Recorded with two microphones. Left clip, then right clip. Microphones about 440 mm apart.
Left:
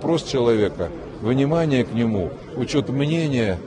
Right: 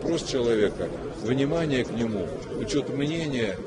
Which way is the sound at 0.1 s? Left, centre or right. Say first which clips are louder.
Left 6 dB; centre.